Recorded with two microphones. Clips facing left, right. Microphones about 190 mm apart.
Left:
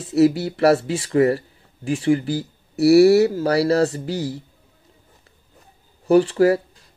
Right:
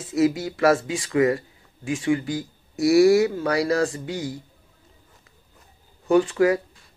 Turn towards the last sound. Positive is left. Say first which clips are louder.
# left 3 dB
turn(degrees=35)  # may be behind; listen again after turning